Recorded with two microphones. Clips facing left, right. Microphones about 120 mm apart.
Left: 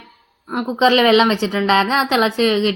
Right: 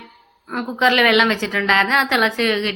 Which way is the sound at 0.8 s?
30° left (ahead or behind).